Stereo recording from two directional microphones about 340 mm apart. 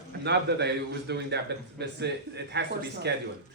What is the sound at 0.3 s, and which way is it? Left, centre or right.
Speech, right.